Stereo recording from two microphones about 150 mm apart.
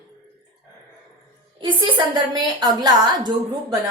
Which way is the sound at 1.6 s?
35° right (ahead or behind).